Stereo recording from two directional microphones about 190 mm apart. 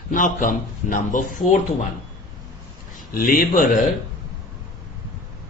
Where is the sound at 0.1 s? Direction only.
45° left (ahead or behind).